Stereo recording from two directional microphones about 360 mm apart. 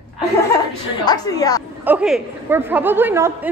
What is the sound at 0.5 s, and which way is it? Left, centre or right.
A woman's voice, centre.